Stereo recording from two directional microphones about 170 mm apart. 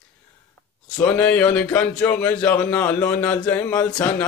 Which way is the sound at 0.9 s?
10° left (ahead or behind).